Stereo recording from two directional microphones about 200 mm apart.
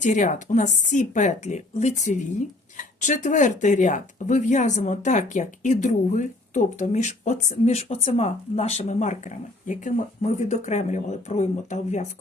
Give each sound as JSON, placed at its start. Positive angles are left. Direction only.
{"t": 0.0, "sound": "speech", "side_deg": 40}